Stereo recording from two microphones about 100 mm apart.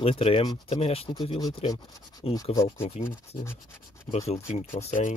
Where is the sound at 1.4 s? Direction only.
40° left (ahead or behind).